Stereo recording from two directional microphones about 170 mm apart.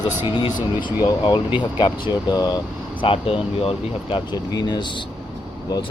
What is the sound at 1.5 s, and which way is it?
Speech, 30° left (ahead or behind).